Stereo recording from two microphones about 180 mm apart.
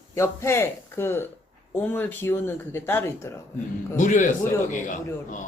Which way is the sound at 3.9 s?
45° left (ahead or behind).